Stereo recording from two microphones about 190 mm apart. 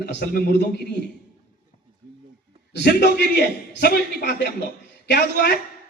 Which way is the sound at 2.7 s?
60° left (ahead or behind).